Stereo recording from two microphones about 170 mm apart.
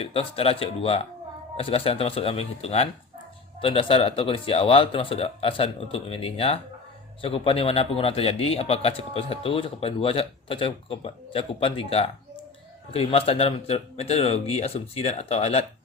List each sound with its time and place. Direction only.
0.0 s a man's voice: 35° left (ahead or behind)